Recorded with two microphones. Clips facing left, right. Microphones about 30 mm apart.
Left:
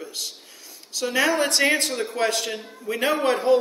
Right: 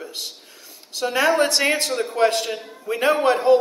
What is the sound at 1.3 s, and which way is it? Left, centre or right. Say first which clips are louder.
Speech: right 3 dB; right.